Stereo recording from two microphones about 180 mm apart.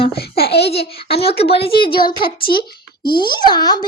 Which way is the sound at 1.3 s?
30° left (ahead or behind).